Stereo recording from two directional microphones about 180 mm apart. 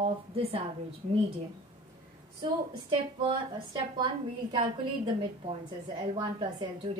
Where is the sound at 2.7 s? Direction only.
25° right (ahead or behind).